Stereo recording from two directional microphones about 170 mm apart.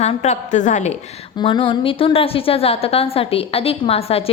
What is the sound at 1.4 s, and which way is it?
A woman's voice, 30° left (ahead or behind).